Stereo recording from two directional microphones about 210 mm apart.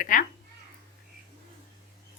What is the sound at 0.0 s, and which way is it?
Speech, 40° left (ahead or behind).